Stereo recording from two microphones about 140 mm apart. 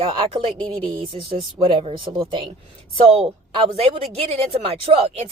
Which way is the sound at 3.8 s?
45° right (ahead or behind).